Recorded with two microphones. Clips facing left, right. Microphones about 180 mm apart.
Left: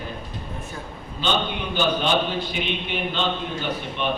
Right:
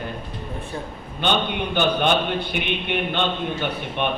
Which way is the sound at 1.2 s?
60° right (ahead or behind).